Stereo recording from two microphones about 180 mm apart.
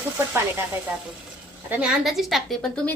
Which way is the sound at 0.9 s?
5° right (ahead or behind).